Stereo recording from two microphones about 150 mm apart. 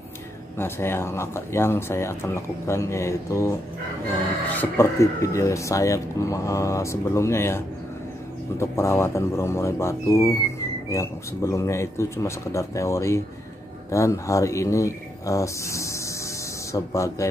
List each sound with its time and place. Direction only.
0.6 s speech: 15° left (ahead or behind)
4.6 s speech: 20° left (ahead or behind)